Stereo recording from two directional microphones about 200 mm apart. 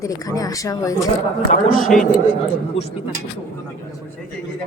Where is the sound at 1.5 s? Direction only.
40° left (ahead or behind).